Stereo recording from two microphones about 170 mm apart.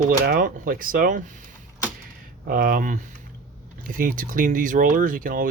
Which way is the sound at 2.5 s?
60° right (ahead or behind).